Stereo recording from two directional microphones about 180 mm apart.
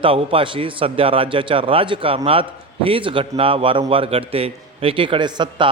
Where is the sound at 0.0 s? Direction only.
30° right (ahead or behind).